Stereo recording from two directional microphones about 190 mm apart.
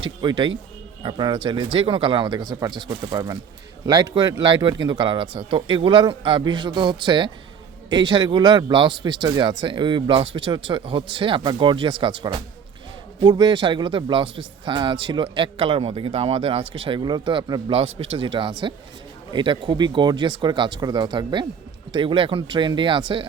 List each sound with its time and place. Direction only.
0.0 s speech: 25° right (ahead or behind)